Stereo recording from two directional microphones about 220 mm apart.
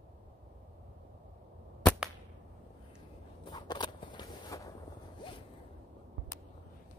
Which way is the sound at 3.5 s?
20° left (ahead or behind).